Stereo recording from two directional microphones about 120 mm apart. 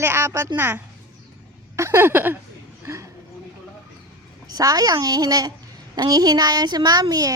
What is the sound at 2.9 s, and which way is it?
Speech, 20° right (ahead or behind).